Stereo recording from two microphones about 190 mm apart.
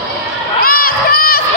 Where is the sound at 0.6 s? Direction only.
50° left (ahead or behind).